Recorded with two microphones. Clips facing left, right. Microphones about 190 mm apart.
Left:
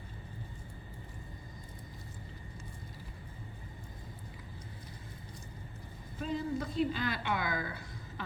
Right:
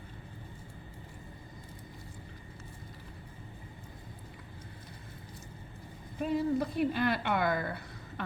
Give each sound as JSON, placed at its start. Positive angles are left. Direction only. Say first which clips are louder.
{"t": 6.2, "sound": "a woman's voice", "louder": "right 5 dB", "side_deg": -60}